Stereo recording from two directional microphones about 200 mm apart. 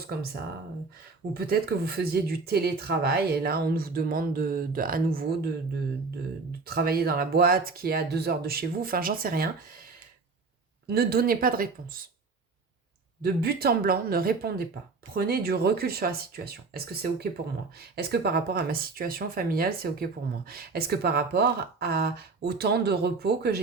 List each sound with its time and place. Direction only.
1.3 s speech: 50° right (ahead or behind)
6.7 s speech: 50° right (ahead or behind)
10.8 s speech: 50° right (ahead or behind)
13.2 s speech: 50° right (ahead or behind)